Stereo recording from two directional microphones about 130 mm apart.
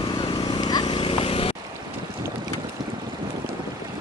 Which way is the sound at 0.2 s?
30° left (ahead or behind).